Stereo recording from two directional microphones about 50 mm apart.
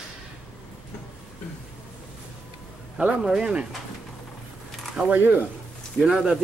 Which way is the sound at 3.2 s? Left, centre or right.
Centre.